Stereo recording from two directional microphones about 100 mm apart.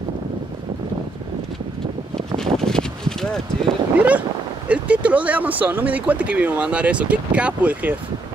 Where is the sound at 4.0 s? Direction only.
15° right (ahead or behind).